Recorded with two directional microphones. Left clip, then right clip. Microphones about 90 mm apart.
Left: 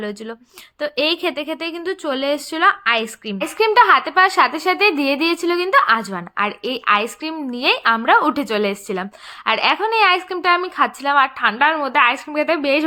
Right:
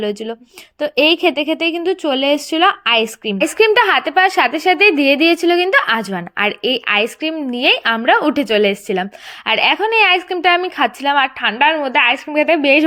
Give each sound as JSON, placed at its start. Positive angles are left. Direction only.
{"t": 0.0, "sound": "a woman's voice", "side_deg": -35}
{"t": 0.8, "sound": "a woman's voice", "side_deg": -25}
{"t": 12.3, "sound": "a woman's voice", "side_deg": -30}